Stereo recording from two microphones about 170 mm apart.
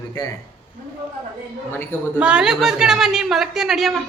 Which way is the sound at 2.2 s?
5° right (ahead or behind).